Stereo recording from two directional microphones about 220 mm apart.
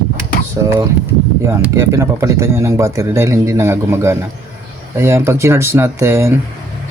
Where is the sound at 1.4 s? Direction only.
10° right (ahead or behind).